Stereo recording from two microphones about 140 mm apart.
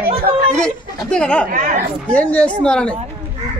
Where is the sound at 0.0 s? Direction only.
90° right.